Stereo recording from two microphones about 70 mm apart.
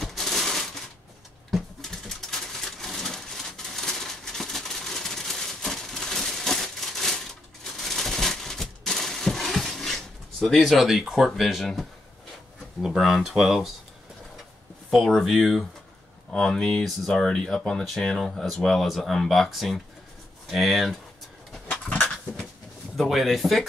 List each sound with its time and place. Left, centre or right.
0.0 s a sound: centre
1.5 s bird: centre
12.8 s speech: centre
14.9 s speech: centre
21.6 s a sound: left
22.9 s speech: centre